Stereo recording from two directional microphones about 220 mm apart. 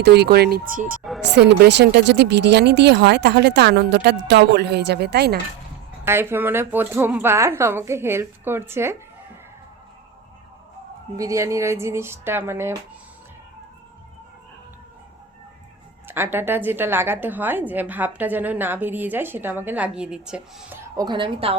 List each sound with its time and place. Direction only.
0.0 s speech: 45° right (ahead or behind)
1.3 s speech: 50° right (ahead or behind)
6.1 s a woman's voice: 10° right (ahead or behind)
11.2 s a woman's voice: 15° right (ahead or behind)
16.0 s a woman's voice: 10° right (ahead or behind)